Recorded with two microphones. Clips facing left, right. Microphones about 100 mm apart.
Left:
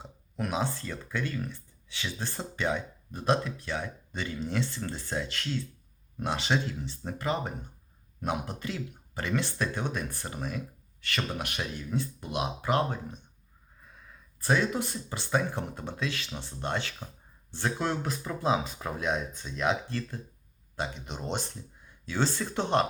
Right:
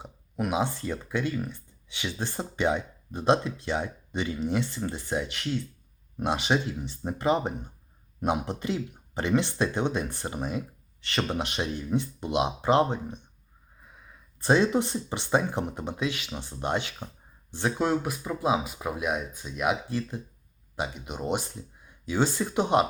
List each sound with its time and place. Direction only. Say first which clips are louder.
0.0 s speech: right 4 dB; 15° right (ahead or behind)